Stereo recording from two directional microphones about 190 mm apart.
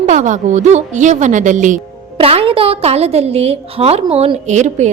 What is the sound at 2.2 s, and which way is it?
A woman's voice, 30° right (ahead or behind).